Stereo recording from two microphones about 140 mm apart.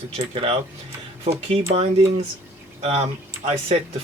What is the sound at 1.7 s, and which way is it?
Speech, 45° right (ahead or behind).